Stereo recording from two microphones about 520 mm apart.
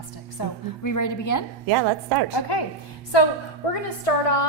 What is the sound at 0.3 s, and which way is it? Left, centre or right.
A woman's voice, left.